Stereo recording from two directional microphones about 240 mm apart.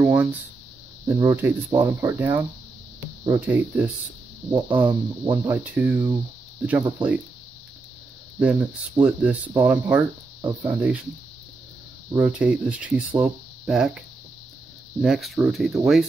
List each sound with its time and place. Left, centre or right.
0.0 s a sound: centre
1.0 s speech: centre
8.4 s speech: centre
12.1 s speech: centre